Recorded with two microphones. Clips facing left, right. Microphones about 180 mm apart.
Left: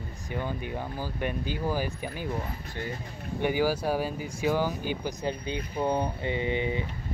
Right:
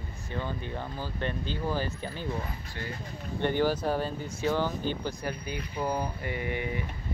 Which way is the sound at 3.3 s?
10° left (ahead or behind).